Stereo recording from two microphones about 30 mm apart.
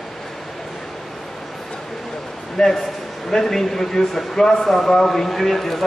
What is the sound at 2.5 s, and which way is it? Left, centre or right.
Speech, centre.